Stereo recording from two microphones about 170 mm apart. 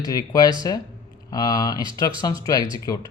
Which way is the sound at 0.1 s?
20° left (ahead or behind).